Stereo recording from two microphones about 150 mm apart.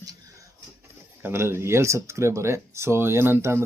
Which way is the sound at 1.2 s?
15° right (ahead or behind).